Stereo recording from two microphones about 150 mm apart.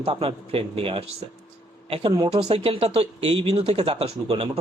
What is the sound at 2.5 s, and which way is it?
Speech, 40° right (ahead or behind).